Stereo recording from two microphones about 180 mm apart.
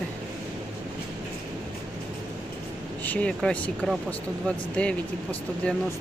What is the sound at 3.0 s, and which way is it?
Speech, 10° left (ahead or behind).